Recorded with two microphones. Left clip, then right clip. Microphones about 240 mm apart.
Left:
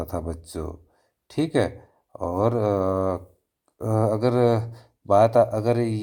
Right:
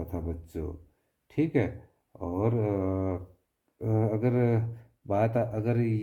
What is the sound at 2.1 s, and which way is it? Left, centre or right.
Mantra, left.